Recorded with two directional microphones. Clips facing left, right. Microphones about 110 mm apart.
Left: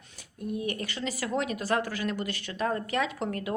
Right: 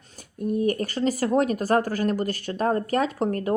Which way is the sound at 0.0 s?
40° right (ahead or behind).